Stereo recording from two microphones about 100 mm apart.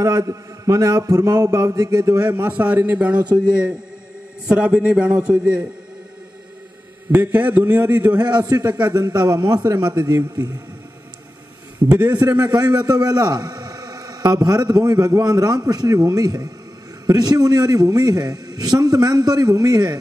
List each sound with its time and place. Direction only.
0.0 s a man's voice: 30° right (ahead or behind); by 5.7 s 10° right (ahead or behind)
7.1 s a man's voice: 15° right (ahead or behind)
8.2 s a man's voice: 45° right (ahead or behind)
12.0 s a man's voice: 15° right (ahead or behind)
12.3 s a man's voice: 40° right (ahead or behind)